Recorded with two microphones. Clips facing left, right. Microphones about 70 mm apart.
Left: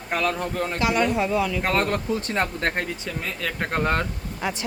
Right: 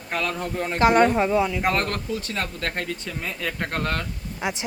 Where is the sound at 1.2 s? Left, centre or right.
Right.